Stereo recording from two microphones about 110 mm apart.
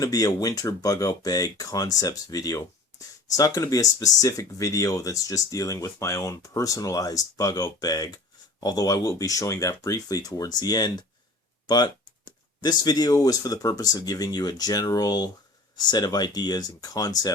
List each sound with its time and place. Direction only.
0.0 s speech: 30° left (ahead or behind)